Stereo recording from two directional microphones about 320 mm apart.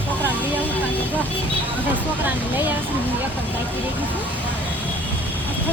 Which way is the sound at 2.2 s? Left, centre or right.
Centre.